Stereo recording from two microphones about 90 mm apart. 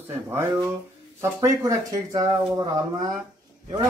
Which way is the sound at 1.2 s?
35° right (ahead or behind).